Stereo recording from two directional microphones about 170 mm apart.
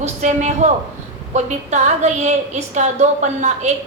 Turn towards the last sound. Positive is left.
turn(degrees=-45)  # may be behind; listen again after turning